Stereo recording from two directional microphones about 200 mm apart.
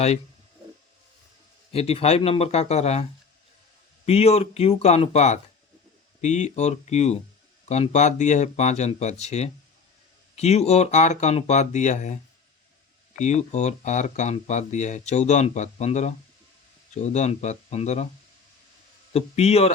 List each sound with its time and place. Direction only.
1.7 s speech: 30° left (ahead or behind)
19.1 s speech: 30° left (ahead or behind)